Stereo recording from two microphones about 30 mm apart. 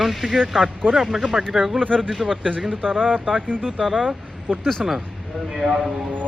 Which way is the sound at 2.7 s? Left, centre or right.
Left.